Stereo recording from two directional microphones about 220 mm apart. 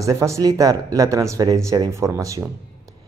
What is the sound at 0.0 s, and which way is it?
Speech, 15° right (ahead or behind).